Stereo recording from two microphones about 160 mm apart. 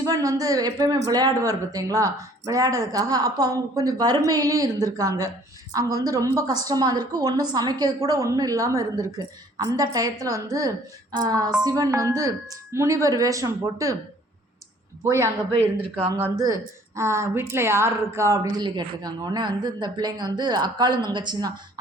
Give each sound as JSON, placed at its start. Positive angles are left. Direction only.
{"t": 0.0, "sound": "speech", "side_deg": -20}
{"t": 15.5, "sound": "speech", "side_deg": -35}
{"t": 16.3, "sound": "speech", "side_deg": -20}